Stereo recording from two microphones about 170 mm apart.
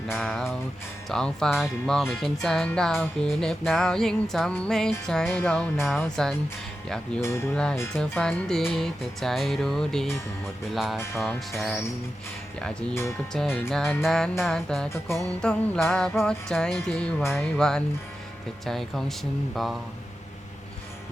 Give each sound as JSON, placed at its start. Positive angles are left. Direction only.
{"t": 0.1, "sound": "speech", "side_deg": 0}
{"t": 7.2, "sound": "speech", "side_deg": 15}
{"t": 7.5, "sound": "speech", "side_deg": 5}